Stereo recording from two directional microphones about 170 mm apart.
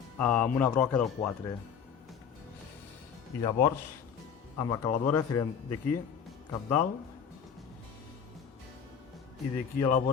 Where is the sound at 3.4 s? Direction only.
20° left (ahead or behind).